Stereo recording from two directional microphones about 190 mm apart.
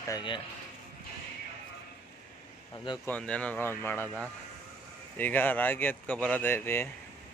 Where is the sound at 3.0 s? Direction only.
5° left (ahead or behind).